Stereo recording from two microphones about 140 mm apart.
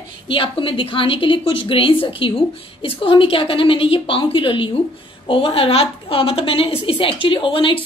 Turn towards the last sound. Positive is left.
turn(degrees=35)  # may be behind; listen again after turning